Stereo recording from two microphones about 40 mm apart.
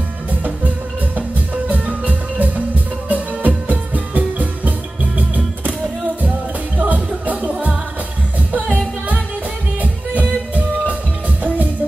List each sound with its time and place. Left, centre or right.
1.1 s music: right
6.8 s music: right
9.8 s music: right